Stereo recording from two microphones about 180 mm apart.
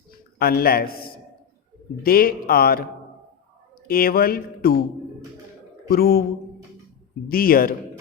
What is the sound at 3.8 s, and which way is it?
Speech, 55° left (ahead or behind).